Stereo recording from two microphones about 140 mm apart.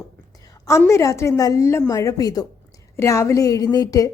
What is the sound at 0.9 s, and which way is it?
A woman's voice, 20° left (ahead or behind).